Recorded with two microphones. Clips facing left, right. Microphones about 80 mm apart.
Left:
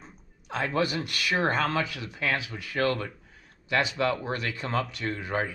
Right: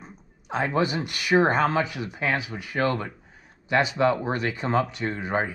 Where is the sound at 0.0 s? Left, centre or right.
Centre.